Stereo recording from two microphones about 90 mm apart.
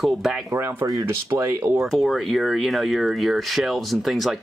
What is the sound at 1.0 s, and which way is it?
Speech, 25° right (ahead or behind).